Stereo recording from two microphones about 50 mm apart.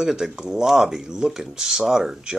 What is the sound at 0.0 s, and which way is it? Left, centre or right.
Speech, centre.